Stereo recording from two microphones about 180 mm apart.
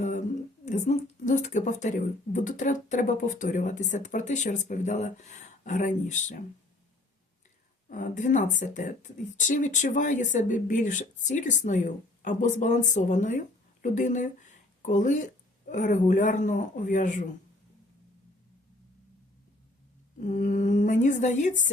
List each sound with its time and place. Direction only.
0.0 s speech: 40° left (ahead or behind)
7.9 s speech: 45° left (ahead or behind)
20.1 s speech: 45° left (ahead or behind)